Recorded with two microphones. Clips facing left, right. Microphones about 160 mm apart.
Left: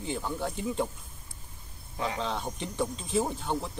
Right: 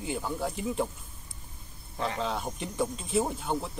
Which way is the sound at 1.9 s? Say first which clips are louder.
Right 1 dB; centre (ahead or behind).